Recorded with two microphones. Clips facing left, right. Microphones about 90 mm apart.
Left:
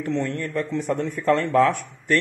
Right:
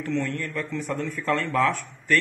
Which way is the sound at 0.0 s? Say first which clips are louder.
Left 2 dB; 25° left (ahead or behind).